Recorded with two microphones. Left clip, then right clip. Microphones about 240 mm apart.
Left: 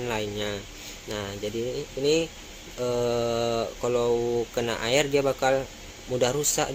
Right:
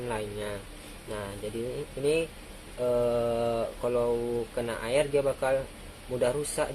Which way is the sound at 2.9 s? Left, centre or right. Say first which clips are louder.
Left 1 dB; left.